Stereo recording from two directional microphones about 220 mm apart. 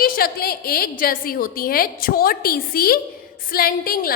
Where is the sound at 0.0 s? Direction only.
40° left (ahead or behind).